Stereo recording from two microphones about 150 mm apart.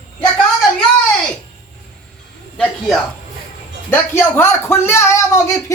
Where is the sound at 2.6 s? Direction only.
5° left (ahead or behind).